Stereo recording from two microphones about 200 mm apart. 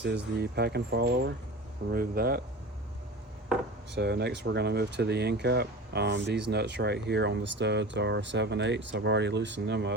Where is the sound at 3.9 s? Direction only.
55° right (ahead or behind).